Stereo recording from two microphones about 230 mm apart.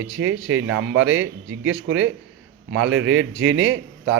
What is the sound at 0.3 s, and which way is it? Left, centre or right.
Speech, right.